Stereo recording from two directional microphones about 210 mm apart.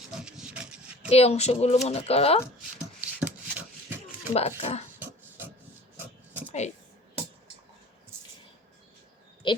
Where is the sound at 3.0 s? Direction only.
5° right (ahead or behind).